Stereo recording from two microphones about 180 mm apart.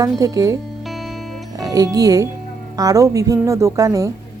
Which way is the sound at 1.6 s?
20° right (ahead or behind).